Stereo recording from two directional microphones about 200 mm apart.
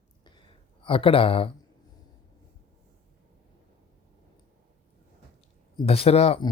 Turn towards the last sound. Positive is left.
turn(degrees=30)  # may be behind; listen again after turning